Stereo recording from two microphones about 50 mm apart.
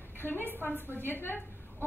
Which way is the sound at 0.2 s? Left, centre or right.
Left.